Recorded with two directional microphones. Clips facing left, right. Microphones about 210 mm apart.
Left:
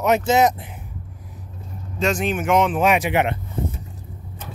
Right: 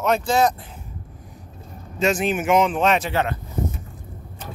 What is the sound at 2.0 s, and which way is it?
A man's voice, 5° right (ahead or behind).